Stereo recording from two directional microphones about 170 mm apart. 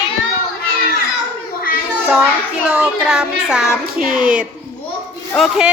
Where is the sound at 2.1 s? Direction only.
5° right (ahead or behind).